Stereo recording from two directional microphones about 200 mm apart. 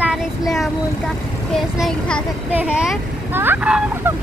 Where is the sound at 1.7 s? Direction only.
Centre (ahead or behind).